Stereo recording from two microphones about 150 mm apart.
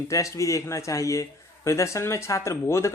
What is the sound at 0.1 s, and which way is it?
A man's voice, 20° left (ahead or behind).